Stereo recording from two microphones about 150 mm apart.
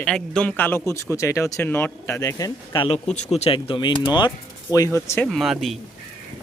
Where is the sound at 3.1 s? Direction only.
45° left (ahead or behind).